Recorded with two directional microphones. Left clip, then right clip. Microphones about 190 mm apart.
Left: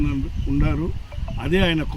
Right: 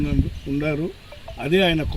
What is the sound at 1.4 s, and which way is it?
Speech, 5° left (ahead or behind).